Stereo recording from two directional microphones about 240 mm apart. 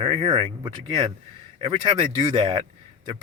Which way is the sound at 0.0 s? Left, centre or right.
Right.